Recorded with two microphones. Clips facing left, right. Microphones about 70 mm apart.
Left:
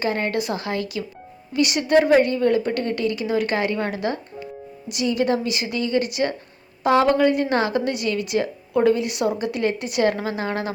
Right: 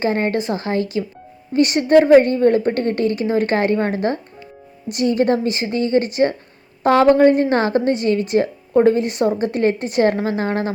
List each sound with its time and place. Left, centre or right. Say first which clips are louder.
0.0 s a woman's voice: right 4 dB; right